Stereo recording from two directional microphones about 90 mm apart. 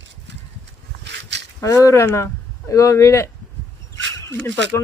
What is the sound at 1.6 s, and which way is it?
Speech, 35° left (ahead or behind).